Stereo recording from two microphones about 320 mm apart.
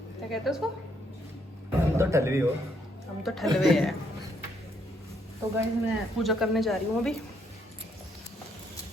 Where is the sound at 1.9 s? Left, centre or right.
Centre.